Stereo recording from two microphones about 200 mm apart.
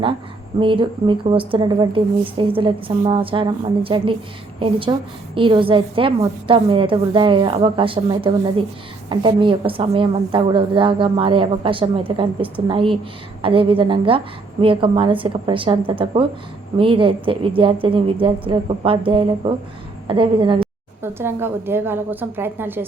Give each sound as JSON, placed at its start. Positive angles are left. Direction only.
{"t": 0.6, "sound": "a woman's voice", "side_deg": -25}
{"t": 21.0, "sound": "a woman's voice", "side_deg": -10}